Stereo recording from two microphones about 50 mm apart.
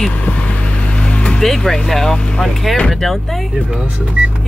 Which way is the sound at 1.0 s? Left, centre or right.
Left.